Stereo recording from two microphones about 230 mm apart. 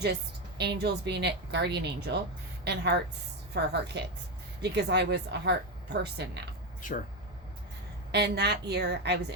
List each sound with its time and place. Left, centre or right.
0.6 s speech: right
8.1 s speech: right